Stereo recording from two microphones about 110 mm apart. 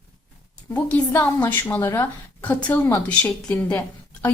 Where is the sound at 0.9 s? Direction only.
15° left (ahead or behind).